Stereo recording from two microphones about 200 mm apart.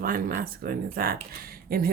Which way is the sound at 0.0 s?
45° right (ahead or behind).